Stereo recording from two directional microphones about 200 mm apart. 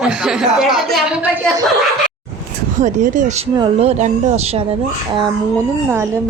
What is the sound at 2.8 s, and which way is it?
Speech, 40° right (ahead or behind).